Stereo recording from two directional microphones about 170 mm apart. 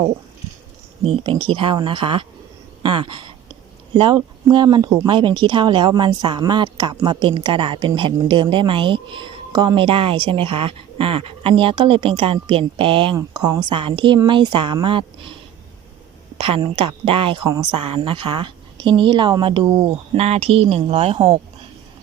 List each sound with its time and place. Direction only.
1.0 s a woman's voice: 30° right (ahead or behind)
16.8 s speech: 30° right (ahead or behind)
19.8 s a woman's voice: 40° right (ahead or behind)